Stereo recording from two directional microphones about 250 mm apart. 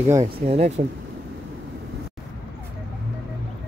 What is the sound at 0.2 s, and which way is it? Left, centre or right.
Speech, right.